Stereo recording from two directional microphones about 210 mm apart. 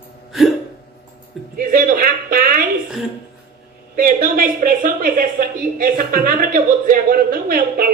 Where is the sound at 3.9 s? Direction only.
40° right (ahead or behind).